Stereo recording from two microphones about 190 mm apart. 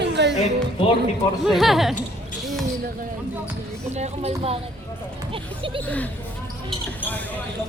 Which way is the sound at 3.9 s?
35° right (ahead or behind).